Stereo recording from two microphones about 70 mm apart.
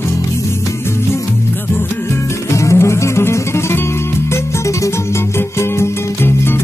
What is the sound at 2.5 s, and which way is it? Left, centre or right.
Music, left.